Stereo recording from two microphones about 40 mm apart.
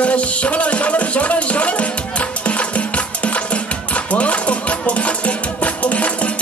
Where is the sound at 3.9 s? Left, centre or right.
Left.